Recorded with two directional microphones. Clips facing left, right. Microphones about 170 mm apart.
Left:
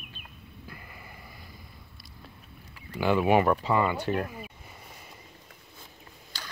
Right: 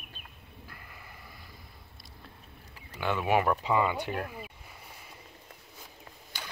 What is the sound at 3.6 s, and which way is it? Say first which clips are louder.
Speech: left 2 dB; 10° right (ahead or behind).